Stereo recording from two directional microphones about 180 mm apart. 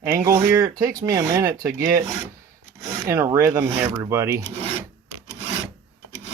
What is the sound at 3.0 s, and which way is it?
Speech, 15° right (ahead or behind).